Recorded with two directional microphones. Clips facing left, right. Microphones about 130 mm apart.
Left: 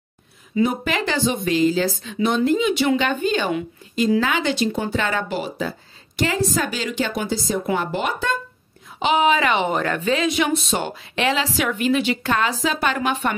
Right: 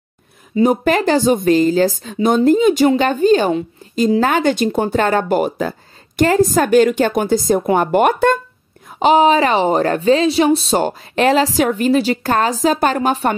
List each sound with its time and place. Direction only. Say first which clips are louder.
0.6 s a woman's voice: right 7 dB; 40° right (ahead or behind)
9.0 s speech: right 6 dB; 35° right (ahead or behind)